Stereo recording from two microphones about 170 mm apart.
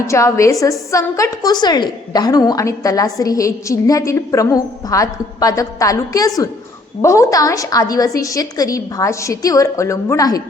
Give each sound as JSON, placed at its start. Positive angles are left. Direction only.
{"t": 0.1, "sound": "a woman's voice", "side_deg": 15}